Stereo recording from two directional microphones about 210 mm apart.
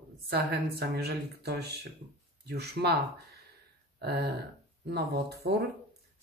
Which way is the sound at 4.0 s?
50° right (ahead or behind).